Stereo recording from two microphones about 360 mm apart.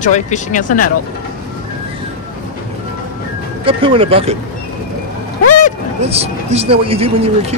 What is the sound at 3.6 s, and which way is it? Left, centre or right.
Speech, centre.